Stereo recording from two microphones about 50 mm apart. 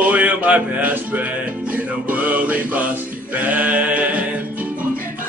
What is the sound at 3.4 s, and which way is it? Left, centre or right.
Speech, right.